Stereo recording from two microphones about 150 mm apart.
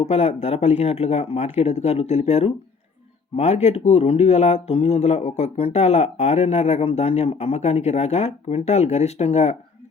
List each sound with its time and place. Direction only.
0.0 s speech: 45° left (ahead or behind)